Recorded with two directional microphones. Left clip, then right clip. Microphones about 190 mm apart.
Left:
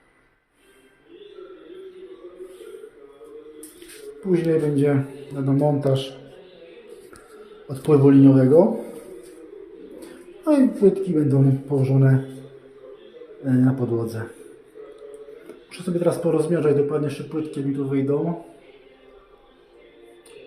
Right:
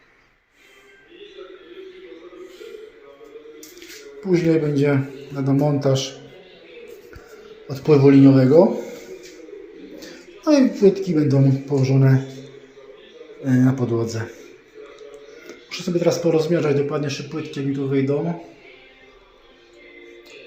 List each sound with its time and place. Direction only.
4.3 s a man's voice: centre (ahead or behind)
7.9 s a man's voice: 5° right (ahead or behind)
10.4 s a woman's voice: centre (ahead or behind)
13.4 s a man's voice: centre (ahead or behind)
15.4 s a man's voice: centre (ahead or behind)